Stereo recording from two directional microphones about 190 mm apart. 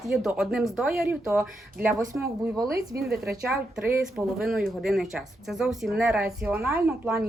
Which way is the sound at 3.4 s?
5° right (ahead or behind).